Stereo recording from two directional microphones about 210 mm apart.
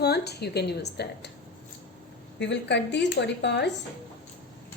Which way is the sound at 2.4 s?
55° left (ahead or behind).